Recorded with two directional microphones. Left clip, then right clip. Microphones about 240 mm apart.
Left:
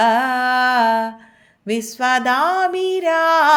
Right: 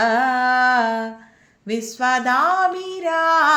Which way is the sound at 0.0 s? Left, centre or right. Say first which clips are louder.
Left 2 dB; left.